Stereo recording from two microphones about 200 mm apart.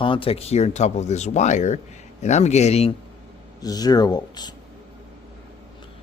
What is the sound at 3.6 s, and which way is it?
Speech, 20° left (ahead or behind).